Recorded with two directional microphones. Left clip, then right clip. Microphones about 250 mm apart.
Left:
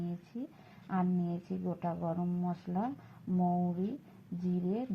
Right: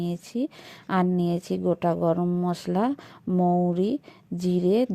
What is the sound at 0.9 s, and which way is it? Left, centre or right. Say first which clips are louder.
Speech: right 11 dB; right.